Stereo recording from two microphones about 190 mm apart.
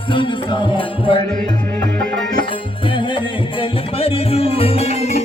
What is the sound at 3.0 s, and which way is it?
Music, 25° left (ahead or behind).